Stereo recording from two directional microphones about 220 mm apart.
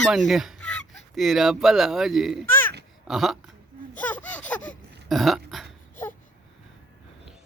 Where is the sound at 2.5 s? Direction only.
10° left (ahead or behind).